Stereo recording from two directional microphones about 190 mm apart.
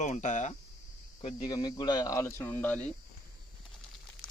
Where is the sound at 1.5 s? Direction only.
20° left (ahead or behind).